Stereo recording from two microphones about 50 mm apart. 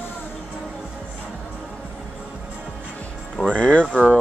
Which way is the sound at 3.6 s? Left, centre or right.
Left.